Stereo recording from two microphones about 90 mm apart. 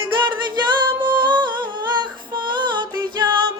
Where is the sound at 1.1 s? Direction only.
60° right (ahead or behind).